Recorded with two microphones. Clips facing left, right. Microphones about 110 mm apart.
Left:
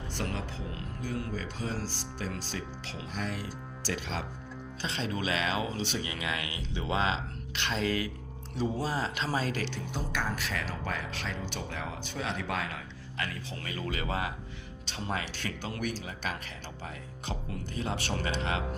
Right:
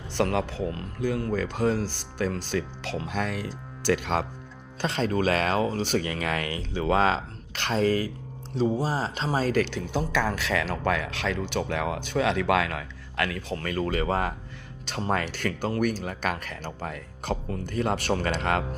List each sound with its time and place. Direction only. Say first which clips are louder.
0.1 s a man's voice: right 12 dB; 80° right; by 9.6 s 40° right (ahead or behind)
9.6 s speech: right 9 dB; 70° right (ahead or behind)
13.6 s speech: right 8 dB; 50° right (ahead or behind)